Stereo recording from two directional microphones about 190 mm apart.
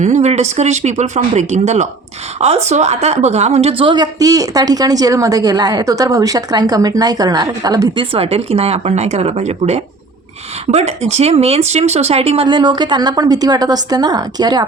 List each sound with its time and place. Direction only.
0.0 s a woman's voice: 35° right (ahead or behind); by 14.6 s 20° right (ahead or behind)